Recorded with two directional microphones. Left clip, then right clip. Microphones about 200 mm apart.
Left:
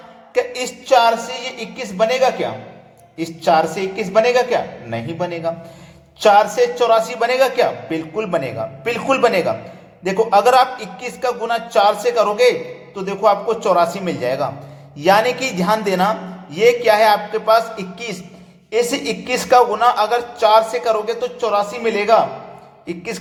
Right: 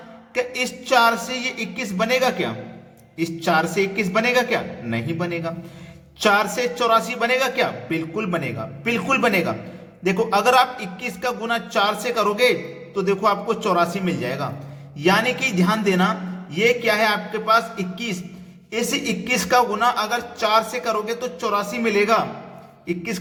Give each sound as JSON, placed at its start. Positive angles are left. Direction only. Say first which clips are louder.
{"t": 0.3, "sound": "a man's voice", "louder": "left 4 dB", "side_deg": -15}